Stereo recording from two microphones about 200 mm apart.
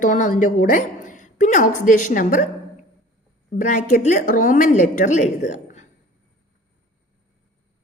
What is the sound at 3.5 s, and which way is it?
A woman's voice, 40° left (ahead or behind).